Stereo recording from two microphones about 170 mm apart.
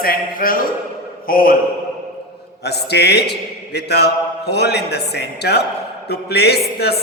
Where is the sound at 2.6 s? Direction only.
75° left (ahead or behind).